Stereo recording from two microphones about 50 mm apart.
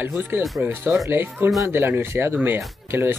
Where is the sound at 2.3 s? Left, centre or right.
Right.